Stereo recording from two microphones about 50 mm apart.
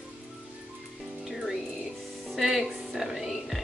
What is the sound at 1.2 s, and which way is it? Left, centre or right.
Music, centre.